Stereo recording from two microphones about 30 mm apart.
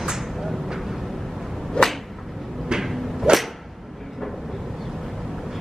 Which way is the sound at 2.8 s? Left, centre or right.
Centre.